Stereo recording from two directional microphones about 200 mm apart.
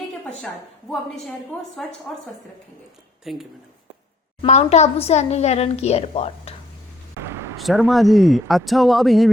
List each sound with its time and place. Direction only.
0.1 s a woman's voice: centre (ahead or behind)
3.3 s speech: centre (ahead or behind)
4.4 s a woman's voice: 35° left (ahead or behind)
7.2 s a sound: 10° right (ahead or behind)
7.6 s speech: centre (ahead or behind)